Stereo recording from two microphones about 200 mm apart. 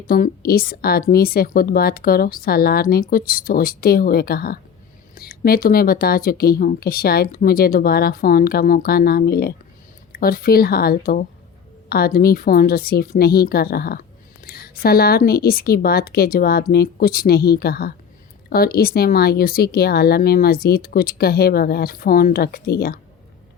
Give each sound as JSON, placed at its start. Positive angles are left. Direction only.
{"t": 0.1, "sound": "a woman's voice", "side_deg": 45}